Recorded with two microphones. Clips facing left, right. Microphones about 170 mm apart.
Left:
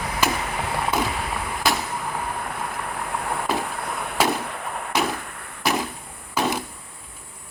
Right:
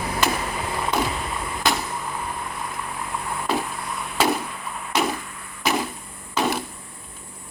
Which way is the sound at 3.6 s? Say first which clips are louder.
Left 2 dB; 60° left (ahead or behind).